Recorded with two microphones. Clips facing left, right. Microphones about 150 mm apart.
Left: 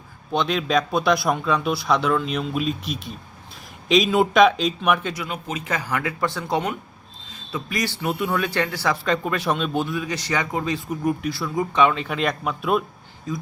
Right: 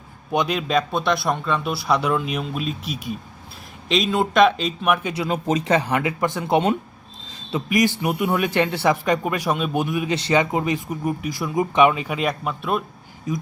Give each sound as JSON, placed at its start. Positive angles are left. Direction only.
{"t": 0.3, "sound": "a man's voice", "side_deg": -10}
{"t": 5.1, "sound": "a man's voice", "side_deg": -35}